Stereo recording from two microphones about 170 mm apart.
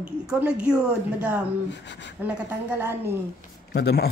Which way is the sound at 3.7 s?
75° left (ahead or behind).